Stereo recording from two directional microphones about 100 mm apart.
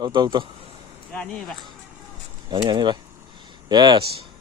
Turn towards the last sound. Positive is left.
turn(degrees=-45)  # may be behind; listen again after turning